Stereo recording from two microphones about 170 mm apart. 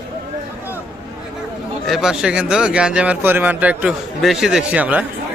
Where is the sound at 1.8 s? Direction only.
Centre (ahead or behind).